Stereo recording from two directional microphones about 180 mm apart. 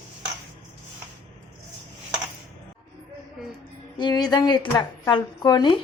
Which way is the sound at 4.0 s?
25° left (ahead or behind).